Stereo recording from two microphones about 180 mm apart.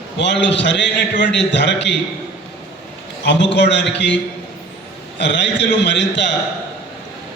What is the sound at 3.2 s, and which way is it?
Speech, 75° left (ahead or behind).